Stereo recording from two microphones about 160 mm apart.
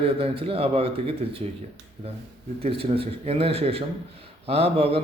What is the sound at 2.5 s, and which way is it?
A man's voice, 35° right (ahead or behind).